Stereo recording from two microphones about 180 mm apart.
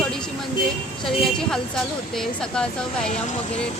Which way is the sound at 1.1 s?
Centre (ahead or behind).